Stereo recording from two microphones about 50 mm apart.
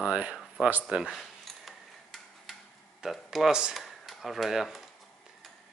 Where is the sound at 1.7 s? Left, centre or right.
Centre.